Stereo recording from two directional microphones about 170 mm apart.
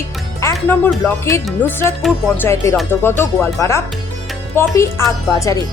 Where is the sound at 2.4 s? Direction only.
15° left (ahead or behind).